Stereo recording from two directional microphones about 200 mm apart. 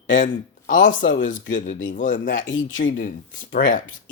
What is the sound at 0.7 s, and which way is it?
Speech, 40° left (ahead or behind).